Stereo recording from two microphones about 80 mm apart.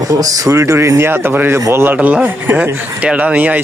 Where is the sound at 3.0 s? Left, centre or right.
Centre.